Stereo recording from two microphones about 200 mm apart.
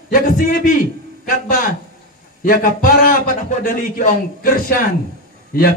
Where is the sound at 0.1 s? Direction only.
45° left (ahead or behind).